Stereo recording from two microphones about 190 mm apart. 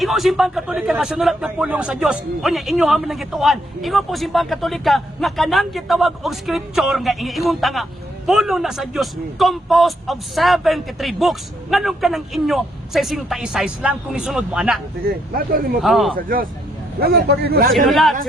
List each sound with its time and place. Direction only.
0.0 s a man's voice: centre (ahead or behind)
15.8 s a man's voice: centre (ahead or behind)
16.1 s a man's voice: 50° right (ahead or behind)
17.7 s a man's voice: centre (ahead or behind)